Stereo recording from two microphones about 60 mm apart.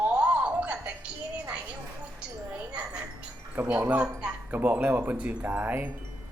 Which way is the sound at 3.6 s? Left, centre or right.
Right.